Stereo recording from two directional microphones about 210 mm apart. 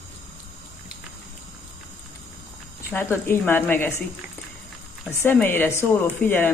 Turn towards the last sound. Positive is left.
turn(degrees=10)  # may be behind; listen again after turning